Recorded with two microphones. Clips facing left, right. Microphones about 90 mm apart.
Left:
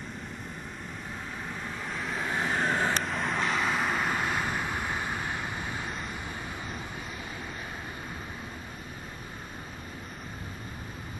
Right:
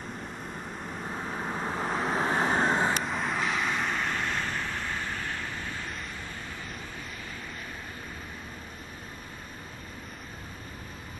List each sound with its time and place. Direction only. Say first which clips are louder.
1.1 s vehicle: right 6 dB; 35° right (ahead or behind)
3.0 s vehicle: even; centre (ahead or behind); by 5.9 s 15° left (ahead or behind)